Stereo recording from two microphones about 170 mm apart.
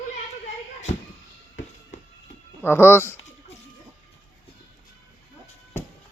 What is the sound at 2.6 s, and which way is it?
Speech, 15° left (ahead or behind).